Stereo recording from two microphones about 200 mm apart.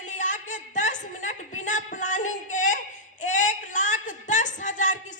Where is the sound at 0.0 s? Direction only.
40° left (ahead or behind).